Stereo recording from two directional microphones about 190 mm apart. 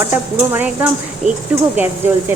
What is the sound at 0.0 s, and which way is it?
A woman's voice, 10° right (ahead or behind).